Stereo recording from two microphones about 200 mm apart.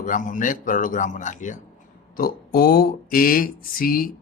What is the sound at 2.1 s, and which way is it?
Speech, 50° left (ahead or behind).